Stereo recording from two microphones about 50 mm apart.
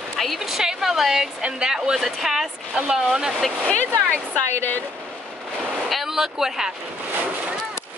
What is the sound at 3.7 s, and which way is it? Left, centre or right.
Speech, left.